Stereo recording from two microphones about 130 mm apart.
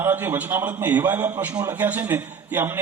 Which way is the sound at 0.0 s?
15° right (ahead or behind).